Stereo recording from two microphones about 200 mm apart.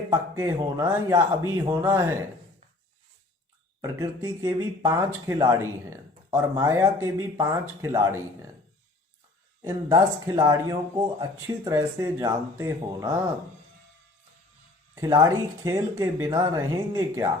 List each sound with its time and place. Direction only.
0.1 s speech: 15° right (ahead or behind)
3.8 s speech: 20° right (ahead or behind)
9.6 s speech: 15° right (ahead or behind)
15.0 s speech: 15° right (ahead or behind)